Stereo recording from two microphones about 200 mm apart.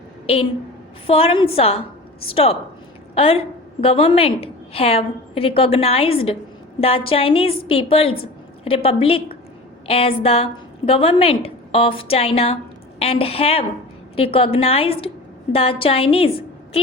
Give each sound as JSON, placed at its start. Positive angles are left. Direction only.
{"t": 1.0, "sound": "a woman's voice", "side_deg": 30}